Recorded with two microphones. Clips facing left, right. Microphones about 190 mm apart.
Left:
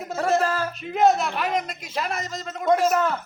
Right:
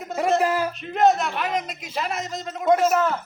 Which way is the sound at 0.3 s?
15° right (ahead or behind).